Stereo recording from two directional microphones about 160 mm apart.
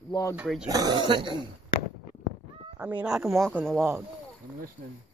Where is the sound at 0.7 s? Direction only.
25° right (ahead or behind).